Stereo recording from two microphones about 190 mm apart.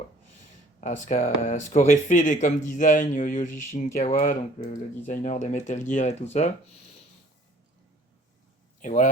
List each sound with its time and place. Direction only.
0.8 s speech: 40° left (ahead or behind)
8.8 s speech: 40° left (ahead or behind)